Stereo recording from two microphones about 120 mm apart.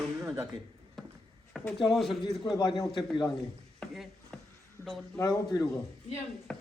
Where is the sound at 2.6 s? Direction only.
35° left (ahead or behind).